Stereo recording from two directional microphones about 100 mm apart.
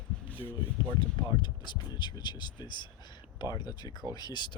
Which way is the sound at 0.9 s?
50° left (ahead or behind).